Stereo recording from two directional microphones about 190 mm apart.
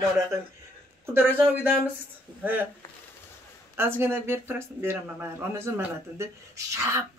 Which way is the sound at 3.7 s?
10° right (ahead or behind).